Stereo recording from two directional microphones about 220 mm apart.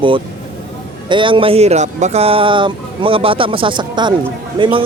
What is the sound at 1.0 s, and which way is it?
Speech, 20° right (ahead or behind).